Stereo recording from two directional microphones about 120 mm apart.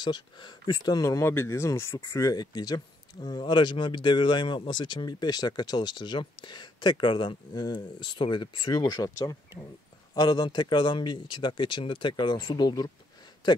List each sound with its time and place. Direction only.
0.0 s speech: 40° left (ahead or behind)